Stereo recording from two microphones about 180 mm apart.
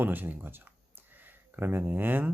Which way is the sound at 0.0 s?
10° right (ahead or behind).